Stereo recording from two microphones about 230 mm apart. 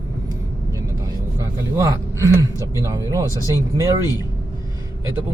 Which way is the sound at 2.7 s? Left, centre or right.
Centre.